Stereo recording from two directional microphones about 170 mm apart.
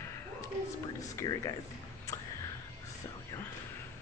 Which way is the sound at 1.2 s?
20° left (ahead or behind).